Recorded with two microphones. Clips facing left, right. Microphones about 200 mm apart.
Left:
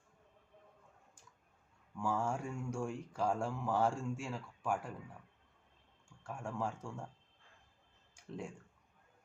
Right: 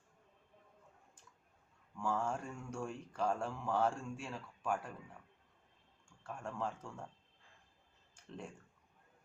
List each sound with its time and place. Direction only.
2.0 s speech: 10° left (ahead or behind)
6.2 s speech: 10° left (ahead or behind)
8.1 s a sound: 10° left (ahead or behind)